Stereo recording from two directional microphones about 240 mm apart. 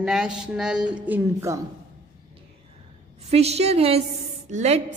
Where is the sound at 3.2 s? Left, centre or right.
Right.